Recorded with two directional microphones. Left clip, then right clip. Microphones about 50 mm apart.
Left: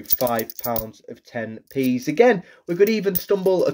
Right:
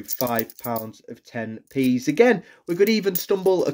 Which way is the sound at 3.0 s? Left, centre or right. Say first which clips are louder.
Left 1 dB; right.